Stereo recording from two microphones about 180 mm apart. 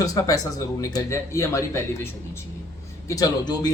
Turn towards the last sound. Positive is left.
turn(degrees=20)  # may be behind; listen again after turning